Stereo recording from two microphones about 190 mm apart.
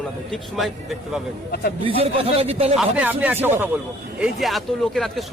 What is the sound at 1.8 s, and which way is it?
Speech, 30° right (ahead or behind).